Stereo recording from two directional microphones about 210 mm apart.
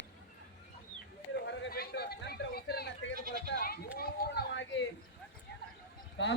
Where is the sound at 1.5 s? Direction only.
50° left (ahead or behind).